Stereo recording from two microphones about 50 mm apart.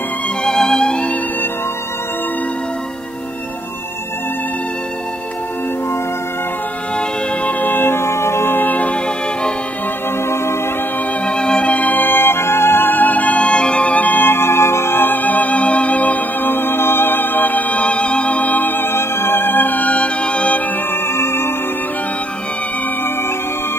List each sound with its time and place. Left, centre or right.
0.4 s music: centre
7.4 s music: left
8.5 s music: left
10.3 s music: left
11.2 s music: centre
11.7 s music: left
20.9 s music: left